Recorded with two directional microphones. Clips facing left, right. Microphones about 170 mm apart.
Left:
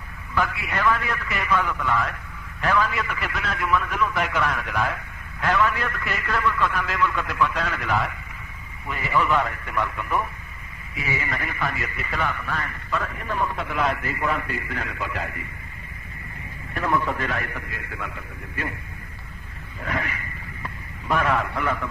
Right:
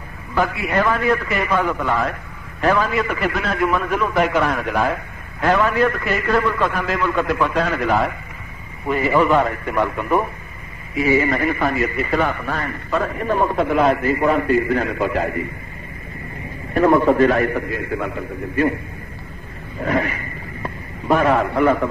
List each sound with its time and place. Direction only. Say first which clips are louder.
0.3 s a man's voice: right 6 dB; 35° right (ahead or behind)
16.7 s a man's voice: right 11 dB; 40° right (ahead or behind)
19.8 s a sound: right 9 dB; 35° right (ahead or behind)